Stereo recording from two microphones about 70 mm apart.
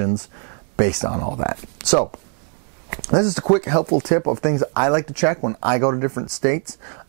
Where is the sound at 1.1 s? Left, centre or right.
Centre.